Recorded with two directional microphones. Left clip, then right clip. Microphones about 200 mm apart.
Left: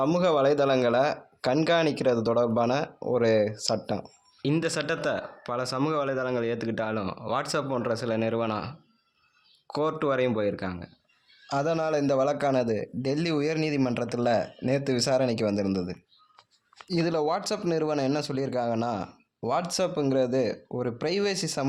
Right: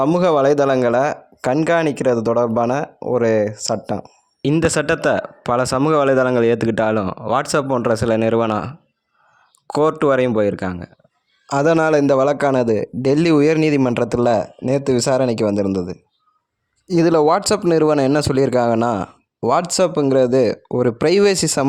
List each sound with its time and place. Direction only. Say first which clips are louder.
0.0 s speech: right 8 dB; 50° right (ahead or behind)